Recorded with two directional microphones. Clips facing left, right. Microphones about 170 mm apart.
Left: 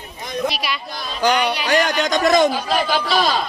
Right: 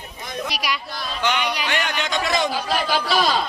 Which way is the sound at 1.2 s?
35° left (ahead or behind).